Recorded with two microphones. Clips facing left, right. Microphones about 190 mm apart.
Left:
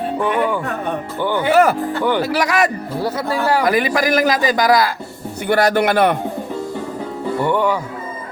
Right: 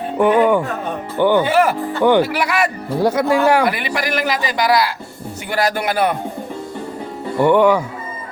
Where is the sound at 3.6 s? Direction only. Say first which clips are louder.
Left 4 dB; 40° left (ahead or behind).